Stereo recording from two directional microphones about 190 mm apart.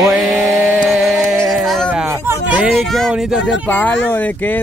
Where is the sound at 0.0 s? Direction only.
Centre (ahead or behind).